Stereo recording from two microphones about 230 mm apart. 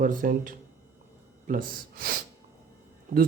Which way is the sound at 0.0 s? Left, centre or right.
Right.